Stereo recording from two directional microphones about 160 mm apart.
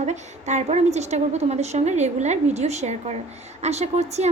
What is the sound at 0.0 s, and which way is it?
A woman's voice, 45° right (ahead or behind).